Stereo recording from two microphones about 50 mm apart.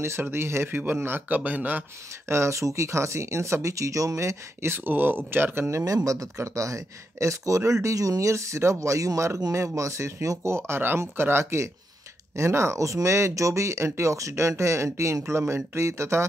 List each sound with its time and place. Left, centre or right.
0.3 s speech: right
0.7 s speech: right
1.3 s speech: right
2.2 s speech: right
4.6 s speech: right
6.0 s speech: right
10.2 s speech: right
11.0 s speech: right
12.4 s speech: right
14.6 s speech: right